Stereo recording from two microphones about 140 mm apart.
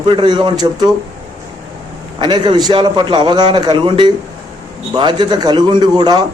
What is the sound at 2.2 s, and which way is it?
Speech, 35° right (ahead or behind).